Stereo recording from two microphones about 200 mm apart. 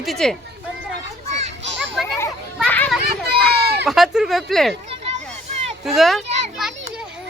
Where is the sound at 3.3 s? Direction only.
50° right (ahead or behind).